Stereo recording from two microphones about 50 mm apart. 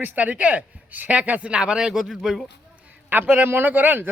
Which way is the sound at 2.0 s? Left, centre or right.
Centre.